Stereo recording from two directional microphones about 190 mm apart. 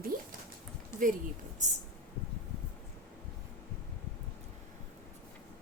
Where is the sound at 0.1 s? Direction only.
50° right (ahead or behind).